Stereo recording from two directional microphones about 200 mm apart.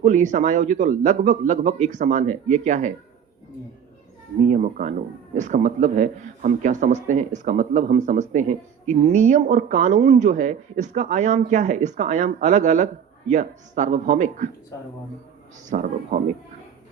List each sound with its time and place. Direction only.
0.0 s speech: 40° right (ahead or behind)
4.4 s speech: 40° right (ahead or behind)
15.7 s speech: 40° right (ahead or behind)